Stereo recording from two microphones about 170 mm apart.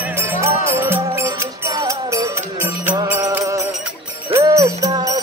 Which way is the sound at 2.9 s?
15° right (ahead or behind).